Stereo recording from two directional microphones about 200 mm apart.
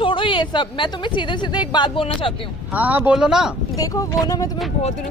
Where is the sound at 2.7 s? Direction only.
10° right (ahead or behind).